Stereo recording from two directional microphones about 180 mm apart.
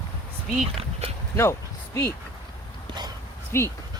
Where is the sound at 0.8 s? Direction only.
35° right (ahead or behind).